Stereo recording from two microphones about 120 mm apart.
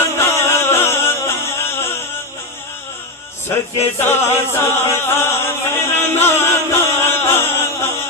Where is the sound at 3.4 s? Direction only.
20° left (ahead or behind).